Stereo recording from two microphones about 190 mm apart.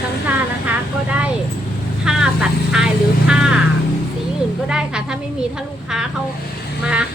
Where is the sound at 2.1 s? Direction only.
5° right (ahead or behind).